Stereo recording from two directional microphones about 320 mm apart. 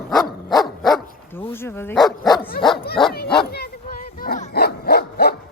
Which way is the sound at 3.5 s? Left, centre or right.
Left.